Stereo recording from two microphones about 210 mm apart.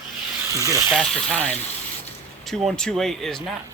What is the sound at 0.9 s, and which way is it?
Speech, 5° left (ahead or behind).